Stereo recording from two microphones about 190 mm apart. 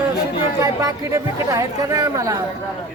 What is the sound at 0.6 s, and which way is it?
Speech, 20° right (ahead or behind).